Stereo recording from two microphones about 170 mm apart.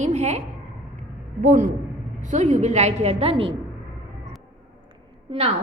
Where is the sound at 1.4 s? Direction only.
45° right (ahead or behind).